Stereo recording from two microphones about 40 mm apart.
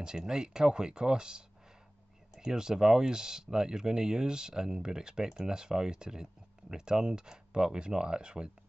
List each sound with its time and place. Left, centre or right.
0.0 s speech: centre